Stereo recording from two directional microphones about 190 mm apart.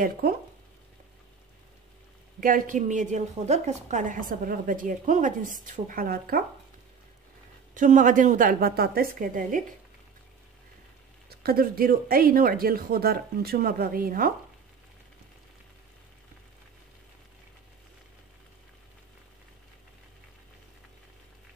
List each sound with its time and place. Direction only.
2.4 s a woman's voice: 45° right (ahead or behind)
7.7 s a woman's voice: 40° right (ahead or behind)
11.2 s a woman's voice: 55° right (ahead or behind)